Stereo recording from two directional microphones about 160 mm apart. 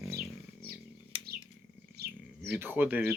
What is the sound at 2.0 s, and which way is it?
Bird, 90° right.